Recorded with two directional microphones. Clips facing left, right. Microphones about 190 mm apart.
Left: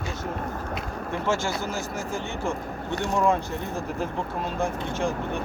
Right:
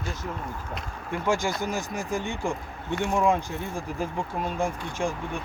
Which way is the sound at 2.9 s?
40° left (ahead or behind).